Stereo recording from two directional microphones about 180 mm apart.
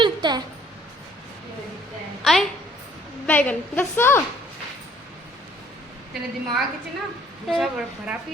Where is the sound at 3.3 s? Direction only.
10° left (ahead or behind).